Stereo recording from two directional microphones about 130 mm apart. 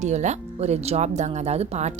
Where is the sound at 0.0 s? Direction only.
65° right (ahead or behind).